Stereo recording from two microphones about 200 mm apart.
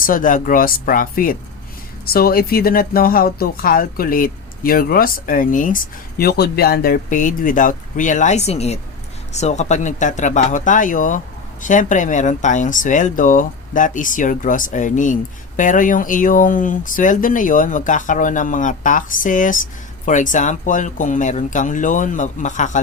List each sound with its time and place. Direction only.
0.0 s speech: 45° left (ahead or behind)